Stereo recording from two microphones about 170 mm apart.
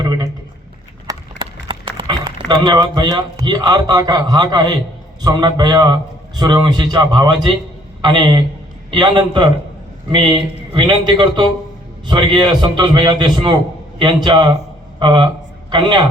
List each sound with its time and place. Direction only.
1.4 s a man's voice: 30° right (ahead or behind)